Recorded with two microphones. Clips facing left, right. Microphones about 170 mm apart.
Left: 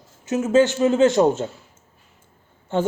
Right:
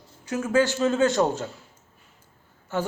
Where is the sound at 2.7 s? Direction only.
25° left (ahead or behind).